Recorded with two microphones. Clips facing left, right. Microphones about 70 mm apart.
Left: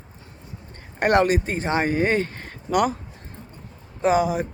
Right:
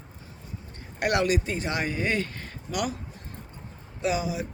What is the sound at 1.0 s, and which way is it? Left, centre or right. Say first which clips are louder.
Speech: left 6 dB; left.